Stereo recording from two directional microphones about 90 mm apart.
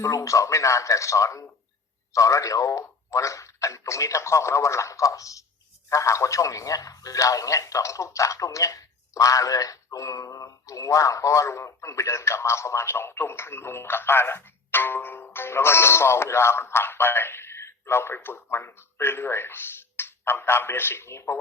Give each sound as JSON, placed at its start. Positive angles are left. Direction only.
{"t": 0.0, "sound": "speech", "side_deg": 35}